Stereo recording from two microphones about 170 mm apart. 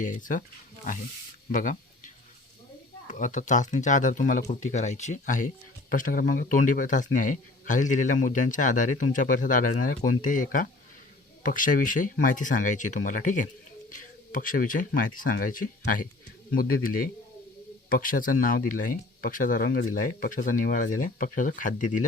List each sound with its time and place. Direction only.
0.0 s a man's voice: 50° left (ahead or behind)
1.5 s a man's voice: 50° left (ahead or behind)
3.1 s a man's voice: 45° left (ahead or behind)